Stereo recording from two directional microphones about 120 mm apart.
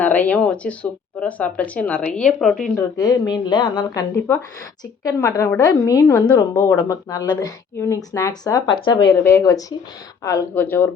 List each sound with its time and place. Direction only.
0.0 s speech: 15° left (ahead or behind)
3.0 s speech: 35° left (ahead or behind)
5.0 s speech: 25° left (ahead or behind)
9.2 s speech: 25° left (ahead or behind)
10.5 s speech: 15° left (ahead or behind)